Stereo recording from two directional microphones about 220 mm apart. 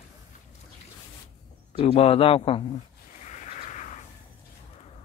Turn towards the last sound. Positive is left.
turn(degrees=35)  # may be behind; listen again after turning